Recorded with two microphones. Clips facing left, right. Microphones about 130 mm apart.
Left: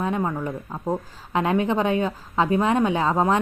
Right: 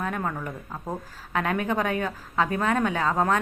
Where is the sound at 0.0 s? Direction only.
20° left (ahead or behind).